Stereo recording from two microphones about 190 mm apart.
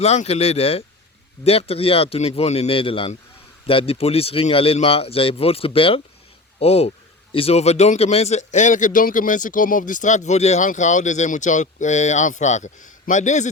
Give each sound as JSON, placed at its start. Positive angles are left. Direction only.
{"t": 0.0, "sound": "speech", "side_deg": 35}